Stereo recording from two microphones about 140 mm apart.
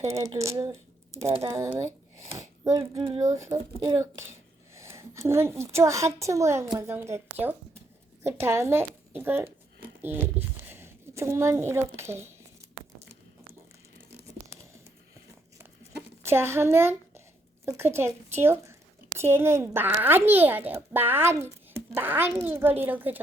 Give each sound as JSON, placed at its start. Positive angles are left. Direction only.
{"t": 0.3, "sound": "speech", "side_deg": -20}
{"t": 3.0, "sound": "speech", "side_deg": -40}
{"t": 3.2, "sound": "a woman's voice", "side_deg": -20}
{"t": 16.2, "sound": "a child's voice", "side_deg": -15}